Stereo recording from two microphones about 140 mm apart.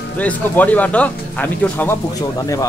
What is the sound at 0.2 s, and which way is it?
Music, 10° left (ahead or behind).